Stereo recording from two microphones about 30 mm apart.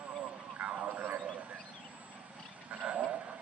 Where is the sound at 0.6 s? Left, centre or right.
Right.